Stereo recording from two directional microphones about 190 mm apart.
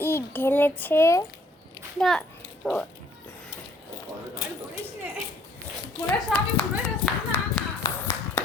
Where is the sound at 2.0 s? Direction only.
Centre (ahead or behind).